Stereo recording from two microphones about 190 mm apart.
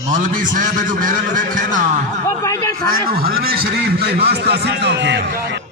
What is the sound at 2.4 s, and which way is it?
Speech, 15° left (ahead or behind).